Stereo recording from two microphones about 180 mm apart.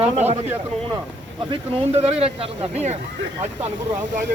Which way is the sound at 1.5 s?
35° right (ahead or behind).